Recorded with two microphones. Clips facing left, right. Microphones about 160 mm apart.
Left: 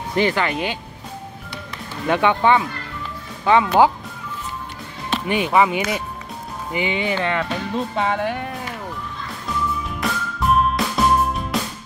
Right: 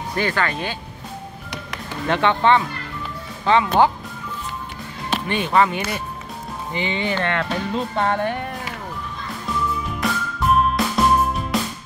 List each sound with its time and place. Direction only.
0.1 s speech: 20° left (ahead or behind)
2.0 s speech: 10° left (ahead or behind)
5.2 s speech: 10° left (ahead or behind)
9.8 s music: centre (ahead or behind)